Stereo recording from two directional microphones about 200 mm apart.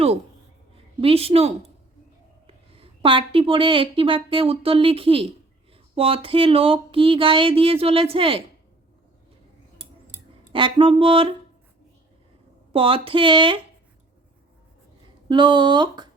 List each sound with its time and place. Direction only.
1.0 s a woman's voice: 30° right (ahead or behind)
10.5 s speech: 25° right (ahead or behind)
12.7 s speech: 25° right (ahead or behind)
15.3 s speech: 25° right (ahead or behind)